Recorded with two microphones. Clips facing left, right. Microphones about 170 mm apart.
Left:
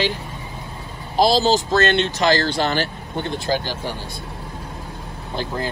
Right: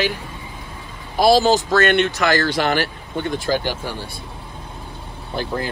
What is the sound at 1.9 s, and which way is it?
Speech, 25° left (ahead or behind).